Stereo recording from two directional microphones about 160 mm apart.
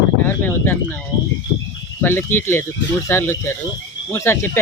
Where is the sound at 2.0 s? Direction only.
15° left (ahead or behind).